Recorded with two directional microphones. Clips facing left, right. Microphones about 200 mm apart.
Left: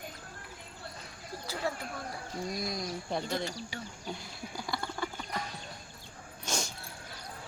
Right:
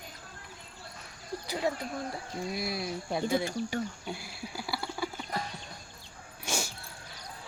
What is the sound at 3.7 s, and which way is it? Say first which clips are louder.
Speech: right 10 dB; 50° right (ahead or behind).